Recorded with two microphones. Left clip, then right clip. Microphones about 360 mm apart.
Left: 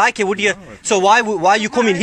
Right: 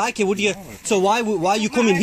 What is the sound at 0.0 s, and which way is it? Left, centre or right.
Speech, left.